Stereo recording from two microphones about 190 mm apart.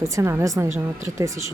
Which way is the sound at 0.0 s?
15° right (ahead or behind).